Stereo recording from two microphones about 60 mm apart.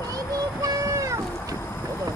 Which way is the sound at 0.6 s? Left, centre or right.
Right.